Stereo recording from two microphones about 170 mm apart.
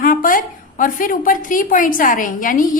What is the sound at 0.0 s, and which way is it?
A woman's voice, 55° left (ahead or behind).